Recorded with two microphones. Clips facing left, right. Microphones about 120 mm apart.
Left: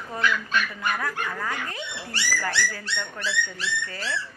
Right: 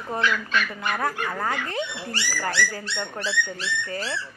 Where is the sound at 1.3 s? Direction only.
40° right (ahead or behind).